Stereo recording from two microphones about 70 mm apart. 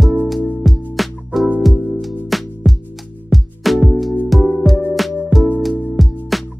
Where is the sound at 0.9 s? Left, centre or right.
Centre.